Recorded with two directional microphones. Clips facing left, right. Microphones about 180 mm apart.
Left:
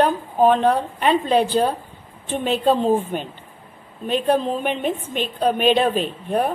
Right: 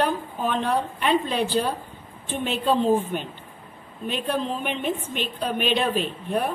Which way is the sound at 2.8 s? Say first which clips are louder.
Left 2 dB; 45° left (ahead or behind).